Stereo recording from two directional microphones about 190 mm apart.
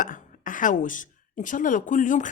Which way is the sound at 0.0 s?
45° left (ahead or behind).